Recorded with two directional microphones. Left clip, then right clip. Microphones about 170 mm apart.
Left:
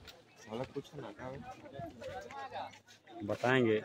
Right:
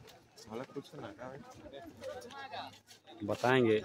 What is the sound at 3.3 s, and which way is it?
Speech, 10° right (ahead or behind).